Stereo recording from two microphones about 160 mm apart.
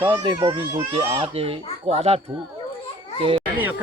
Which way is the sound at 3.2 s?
35° right (ahead or behind).